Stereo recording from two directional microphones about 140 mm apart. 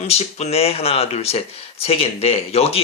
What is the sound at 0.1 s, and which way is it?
Speech, 50° left (ahead or behind).